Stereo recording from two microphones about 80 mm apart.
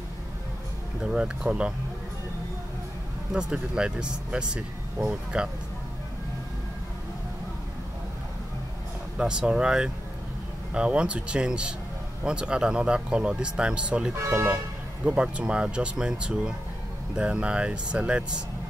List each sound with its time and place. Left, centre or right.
1.0 s speech: centre
3.3 s speech: centre
9.2 s speech: centre
14.1 s speech: right
15.0 s speech: centre